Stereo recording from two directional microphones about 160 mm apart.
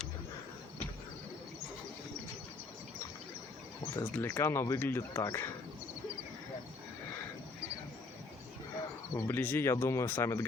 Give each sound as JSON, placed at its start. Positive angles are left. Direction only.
{"t": 3.9, "sound": "speech", "side_deg": 15}
{"t": 9.1, "sound": "speech", "side_deg": 15}